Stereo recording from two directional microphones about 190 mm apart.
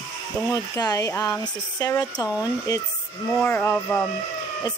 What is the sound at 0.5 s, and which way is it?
Speech, 20° left (ahead or behind).